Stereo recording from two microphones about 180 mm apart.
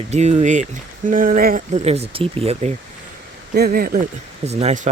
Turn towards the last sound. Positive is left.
turn(degrees=-40)  # may be behind; listen again after turning